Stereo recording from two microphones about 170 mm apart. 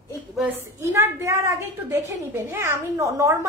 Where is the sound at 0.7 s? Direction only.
15° right (ahead or behind).